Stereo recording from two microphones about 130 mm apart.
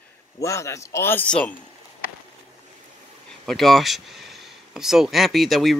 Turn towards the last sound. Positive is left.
turn(degrees=0)  # may be behind; listen again after turning